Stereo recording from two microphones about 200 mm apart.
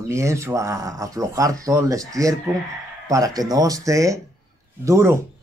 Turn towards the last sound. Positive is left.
turn(degrees=-15)  # may be behind; listen again after turning